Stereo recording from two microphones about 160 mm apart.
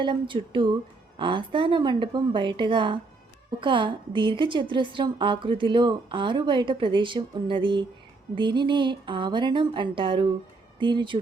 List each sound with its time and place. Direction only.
0.0 s a woman's voice: 30° right (ahead or behind)